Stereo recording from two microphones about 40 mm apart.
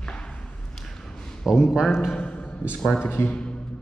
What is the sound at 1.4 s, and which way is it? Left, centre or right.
Speech, centre.